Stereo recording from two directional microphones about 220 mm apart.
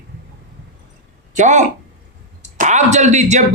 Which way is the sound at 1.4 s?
35° right (ahead or behind).